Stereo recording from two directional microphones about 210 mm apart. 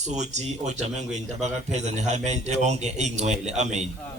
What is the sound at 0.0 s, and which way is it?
A man's voice, 35° right (ahead or behind).